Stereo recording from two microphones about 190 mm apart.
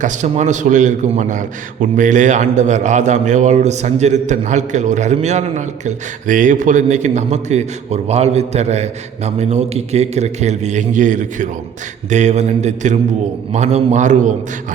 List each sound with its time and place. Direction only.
0.0 s a man's voice: 40° right (ahead or behind)